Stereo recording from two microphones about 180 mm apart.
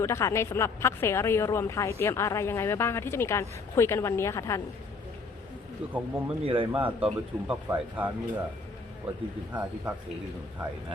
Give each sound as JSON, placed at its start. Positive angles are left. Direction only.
{"t": 0.0, "sound": "speech", "side_deg": 15}
{"t": 5.9, "sound": "speech", "side_deg": -10}
{"t": 6.4, "sound": "speech", "side_deg": -30}
{"t": 6.8, "sound": "speech", "side_deg": -10}
{"t": 9.5, "sound": "speech", "side_deg": -10}